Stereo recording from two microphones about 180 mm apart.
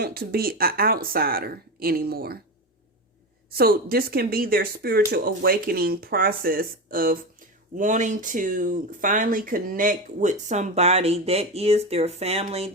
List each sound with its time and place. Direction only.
0.0 s speech: 55° right (ahead or behind)
3.5 s speech: 55° right (ahead or behind); by 12.7 s 35° right (ahead or behind)